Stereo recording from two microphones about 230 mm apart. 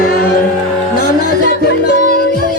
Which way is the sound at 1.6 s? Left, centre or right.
Left.